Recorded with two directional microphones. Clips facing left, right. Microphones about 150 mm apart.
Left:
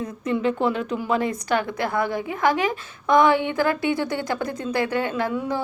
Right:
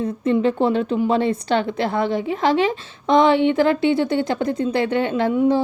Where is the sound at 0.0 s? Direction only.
30° right (ahead or behind).